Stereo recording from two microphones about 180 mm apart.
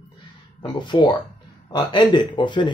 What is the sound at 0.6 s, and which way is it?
Speech, 25° left (ahead or behind).